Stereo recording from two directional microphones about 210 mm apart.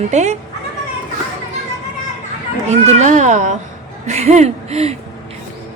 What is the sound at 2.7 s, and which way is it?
A woman's voice, 35° right (ahead or behind).